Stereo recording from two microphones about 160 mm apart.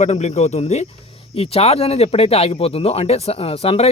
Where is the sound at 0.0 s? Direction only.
45° left (ahead or behind).